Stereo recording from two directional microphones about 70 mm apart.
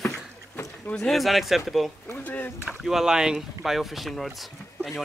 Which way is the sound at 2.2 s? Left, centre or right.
Left.